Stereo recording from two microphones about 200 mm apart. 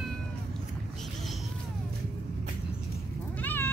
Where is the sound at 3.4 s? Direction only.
10° left (ahead or behind).